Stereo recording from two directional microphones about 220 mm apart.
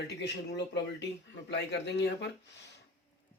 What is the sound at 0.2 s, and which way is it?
Speech, 50° left (ahead or behind).